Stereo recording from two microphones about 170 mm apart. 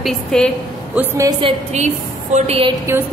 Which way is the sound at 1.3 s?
30° right (ahead or behind).